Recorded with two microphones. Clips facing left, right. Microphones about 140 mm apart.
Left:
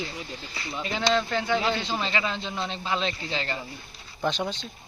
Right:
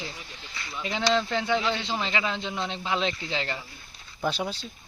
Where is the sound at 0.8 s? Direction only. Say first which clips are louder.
Even; 15° right (ahead or behind).